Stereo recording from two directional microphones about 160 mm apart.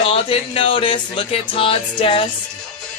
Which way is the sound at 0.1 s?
35° left (ahead or behind).